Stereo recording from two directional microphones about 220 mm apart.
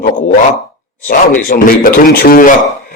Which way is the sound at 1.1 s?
40° left (ahead or behind).